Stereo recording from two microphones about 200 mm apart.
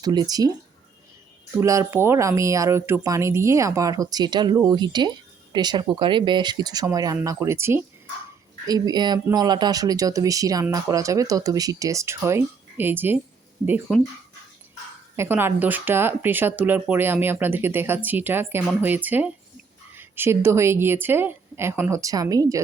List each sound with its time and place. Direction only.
0.0 s speech: 20° right (ahead or behind)
1.5 s speech: 15° right (ahead or behind)
15.1 s speech: 10° right (ahead or behind)